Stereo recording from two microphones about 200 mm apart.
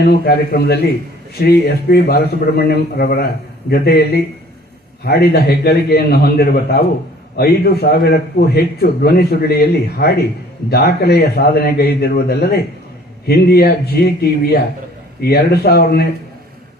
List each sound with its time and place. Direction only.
0.0 s a man's voice: 50° left (ahead or behind)